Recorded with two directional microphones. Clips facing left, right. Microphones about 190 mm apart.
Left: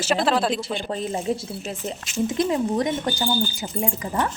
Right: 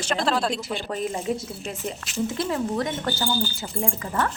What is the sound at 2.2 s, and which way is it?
Speech, 20° left (ahead or behind).